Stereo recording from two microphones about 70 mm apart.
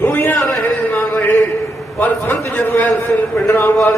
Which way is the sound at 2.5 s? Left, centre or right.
Left.